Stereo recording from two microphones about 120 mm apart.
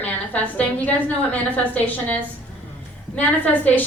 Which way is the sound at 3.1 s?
15° left (ahead or behind).